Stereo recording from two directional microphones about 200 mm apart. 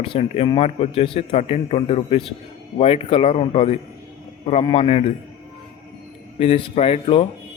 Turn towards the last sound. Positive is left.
turn(degrees=30)  # may be behind; listen again after turning